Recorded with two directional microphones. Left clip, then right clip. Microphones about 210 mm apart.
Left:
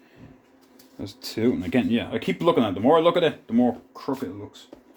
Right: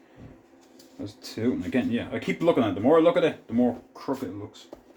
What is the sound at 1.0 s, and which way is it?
Speech, 50° left (ahead or behind).